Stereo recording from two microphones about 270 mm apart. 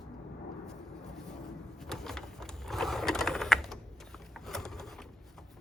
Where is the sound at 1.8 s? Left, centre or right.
Centre.